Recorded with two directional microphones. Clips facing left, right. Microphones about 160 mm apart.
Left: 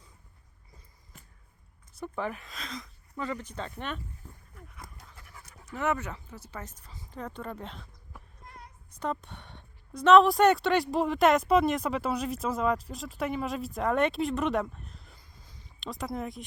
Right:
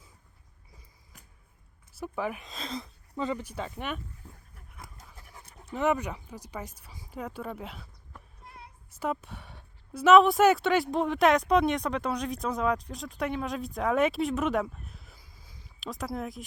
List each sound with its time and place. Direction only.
1.9 s speech: 5° right (ahead or behind)
2.5 s speech: 30° right (ahead or behind); by 4.0 s 10° right (ahead or behind)
5.1 s speech: 25° right (ahead or behind); by 7.9 s 5° right (ahead or behind)
8.4 s a sound: 5° right (ahead or behind)
10.9 s speech: centre (ahead or behind)